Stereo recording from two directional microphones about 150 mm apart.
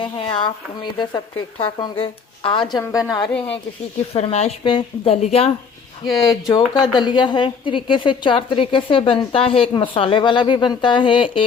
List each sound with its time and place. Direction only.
0.0 s a woman's voice: 35° left (ahead or behind)
4.1 s a woman's voice: 45° left (ahead or behind)
6.5 s a woman's voice: 30° left (ahead or behind)